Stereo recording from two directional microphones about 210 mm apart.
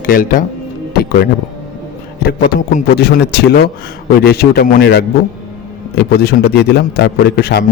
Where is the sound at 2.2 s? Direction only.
45° left (ahead or behind).